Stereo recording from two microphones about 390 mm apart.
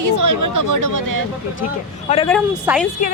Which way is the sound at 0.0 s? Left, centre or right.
Right.